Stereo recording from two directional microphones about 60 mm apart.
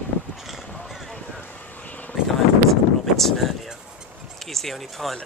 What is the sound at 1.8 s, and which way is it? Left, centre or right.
Vehicle, left.